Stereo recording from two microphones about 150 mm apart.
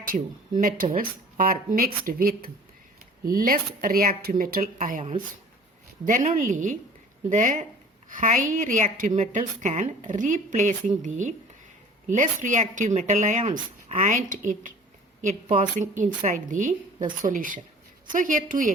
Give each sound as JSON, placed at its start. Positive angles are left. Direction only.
{"t": 0.0, "sound": "a woman's voice", "side_deg": -65}